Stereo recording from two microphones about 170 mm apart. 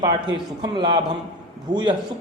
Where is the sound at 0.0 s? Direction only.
25° right (ahead or behind).